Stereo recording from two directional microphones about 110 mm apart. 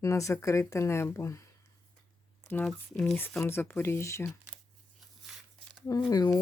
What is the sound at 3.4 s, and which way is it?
Speech, 20° left (ahead or behind).